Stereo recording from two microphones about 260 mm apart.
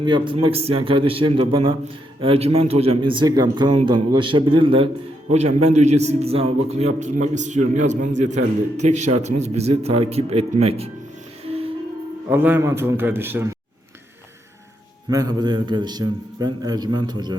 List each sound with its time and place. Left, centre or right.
0.0 s a man's voice: centre
12.3 s a man's voice: centre
15.1 s a man's voice: centre